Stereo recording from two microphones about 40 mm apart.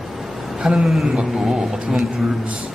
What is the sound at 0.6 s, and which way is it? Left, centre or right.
Speech, centre.